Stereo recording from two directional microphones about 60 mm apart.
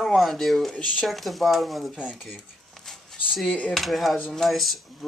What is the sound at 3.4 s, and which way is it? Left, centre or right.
Speech, left.